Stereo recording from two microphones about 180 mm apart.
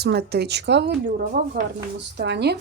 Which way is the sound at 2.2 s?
70° right (ahead or behind).